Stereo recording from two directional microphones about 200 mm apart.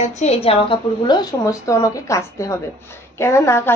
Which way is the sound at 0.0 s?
35° left (ahead or behind).